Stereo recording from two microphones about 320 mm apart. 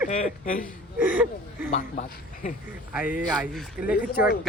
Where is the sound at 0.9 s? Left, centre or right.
Centre.